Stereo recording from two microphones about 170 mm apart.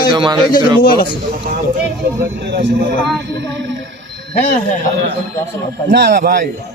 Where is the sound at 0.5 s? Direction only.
60° left (ahead or behind).